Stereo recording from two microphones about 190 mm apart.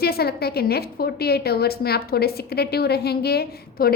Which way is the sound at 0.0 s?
55° left (ahead or behind).